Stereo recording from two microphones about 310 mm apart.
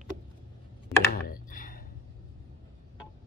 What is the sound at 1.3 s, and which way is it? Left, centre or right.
Clicking, left.